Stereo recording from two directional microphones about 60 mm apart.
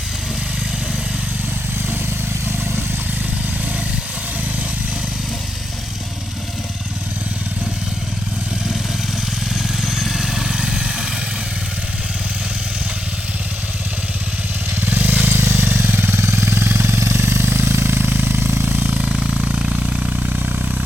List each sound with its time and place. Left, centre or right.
9.8 s vehicle: centre
14.8 s jackhammer: right
18.9 s vehicle: centre